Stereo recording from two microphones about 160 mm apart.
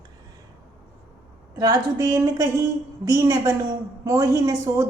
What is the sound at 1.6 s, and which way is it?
A woman's voice, 20° right (ahead or behind).